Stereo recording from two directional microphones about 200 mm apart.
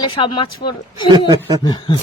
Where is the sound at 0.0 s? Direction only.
25° left (ahead or behind).